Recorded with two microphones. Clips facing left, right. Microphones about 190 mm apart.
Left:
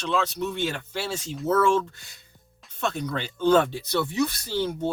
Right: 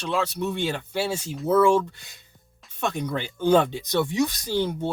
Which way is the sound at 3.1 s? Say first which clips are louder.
Even; 10° right (ahead or behind).